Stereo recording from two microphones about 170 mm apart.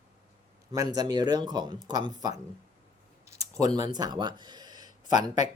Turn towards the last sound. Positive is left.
turn(degrees=-25)  # may be behind; listen again after turning